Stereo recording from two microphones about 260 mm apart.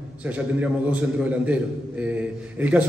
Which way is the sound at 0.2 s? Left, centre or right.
Centre.